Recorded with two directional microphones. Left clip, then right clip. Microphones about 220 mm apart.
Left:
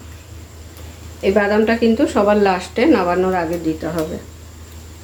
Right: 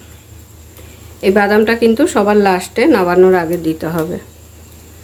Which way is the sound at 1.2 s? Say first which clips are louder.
Right 4 dB; 45° right (ahead or behind).